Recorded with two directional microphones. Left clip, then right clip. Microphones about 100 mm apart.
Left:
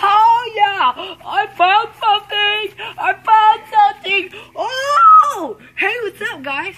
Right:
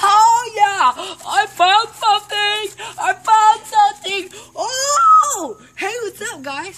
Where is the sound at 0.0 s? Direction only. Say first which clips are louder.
Even; 20° right (ahead or behind).